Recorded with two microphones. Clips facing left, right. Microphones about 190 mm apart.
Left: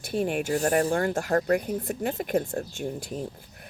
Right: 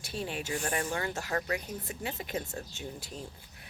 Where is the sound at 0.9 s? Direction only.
50° left (ahead or behind).